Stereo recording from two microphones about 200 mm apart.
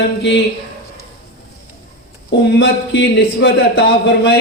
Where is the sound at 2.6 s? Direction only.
55° left (ahead or behind).